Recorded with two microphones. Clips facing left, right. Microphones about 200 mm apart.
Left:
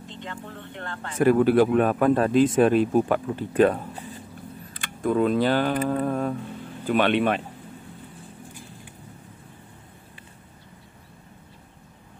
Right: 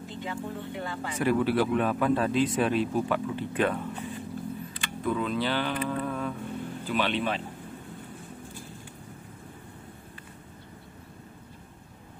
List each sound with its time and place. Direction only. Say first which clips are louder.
0.0 s music: right 3 dB; 5° right (ahead or behind)
1.1 s speech: left 7 dB; 50° left (ahead or behind)
4.7 s speech: left 7 dB; 50° left (ahead or behind)
6.9 s speech: left 7 dB; 60° left (ahead or behind)